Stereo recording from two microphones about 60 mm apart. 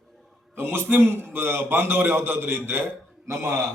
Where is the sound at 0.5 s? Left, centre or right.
Right.